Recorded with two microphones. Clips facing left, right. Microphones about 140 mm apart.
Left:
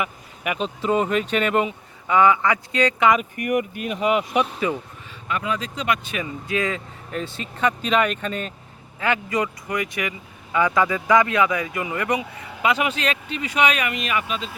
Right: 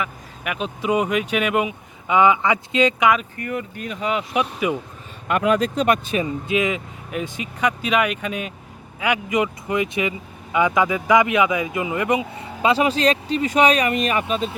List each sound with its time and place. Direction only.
0.0 s vehicle: centre (ahead or behind)
0.8 s speech: 10° right (ahead or behind)
2.0 s speech: 20° right (ahead or behind)
3.4 s speech: 15° left (ahead or behind)
3.8 s speech: 5° left (ahead or behind)
5.3 s speech: 60° right (ahead or behind)
6.1 s speech: 25° right (ahead or behind)